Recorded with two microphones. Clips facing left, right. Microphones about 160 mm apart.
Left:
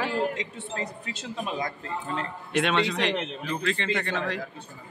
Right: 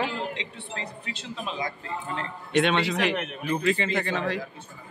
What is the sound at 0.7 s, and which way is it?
Speech, 40° left (ahead or behind).